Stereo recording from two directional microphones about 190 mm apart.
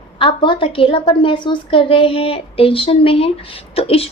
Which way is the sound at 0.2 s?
25° left (ahead or behind).